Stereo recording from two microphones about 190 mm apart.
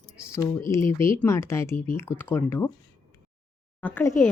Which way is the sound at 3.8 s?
10° left (ahead or behind).